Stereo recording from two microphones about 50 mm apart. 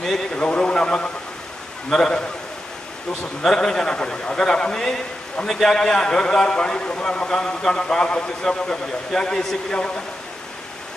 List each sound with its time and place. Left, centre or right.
0.0 s a man's voice: centre
0.4 s a man's voice: left
3.4 s a man's voice: centre